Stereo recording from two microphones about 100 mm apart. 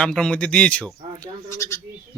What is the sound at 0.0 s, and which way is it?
Speech, 10° left (ahead or behind).